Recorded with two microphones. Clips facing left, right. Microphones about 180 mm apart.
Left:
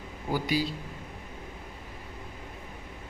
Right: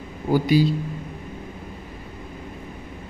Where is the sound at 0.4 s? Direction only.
20° right (ahead or behind).